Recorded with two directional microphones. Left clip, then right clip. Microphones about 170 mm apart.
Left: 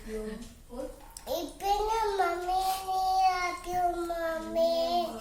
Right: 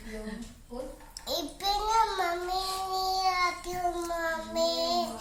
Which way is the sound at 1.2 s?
5° left (ahead or behind).